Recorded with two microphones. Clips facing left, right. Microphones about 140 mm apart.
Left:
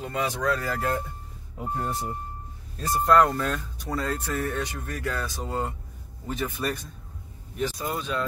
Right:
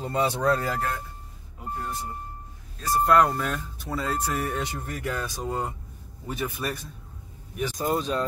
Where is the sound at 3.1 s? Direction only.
5° right (ahead or behind).